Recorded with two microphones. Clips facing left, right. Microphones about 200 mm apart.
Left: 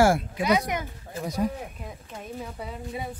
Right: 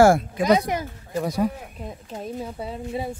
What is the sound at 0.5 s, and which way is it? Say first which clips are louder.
Speech: right 5 dB; 30° right (ahead or behind).